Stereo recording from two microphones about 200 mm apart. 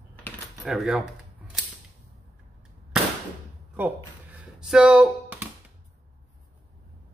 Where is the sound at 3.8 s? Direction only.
10° right (ahead or behind).